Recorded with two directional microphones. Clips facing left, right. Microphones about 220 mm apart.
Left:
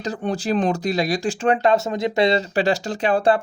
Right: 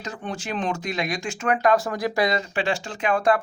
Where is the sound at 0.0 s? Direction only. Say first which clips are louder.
Left 8 dB; 35° left (ahead or behind).